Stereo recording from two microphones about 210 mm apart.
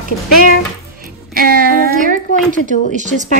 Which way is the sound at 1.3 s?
45° right (ahead or behind).